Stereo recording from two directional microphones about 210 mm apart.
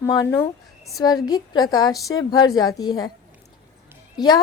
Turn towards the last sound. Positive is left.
turn(degrees=20)  # may be behind; listen again after turning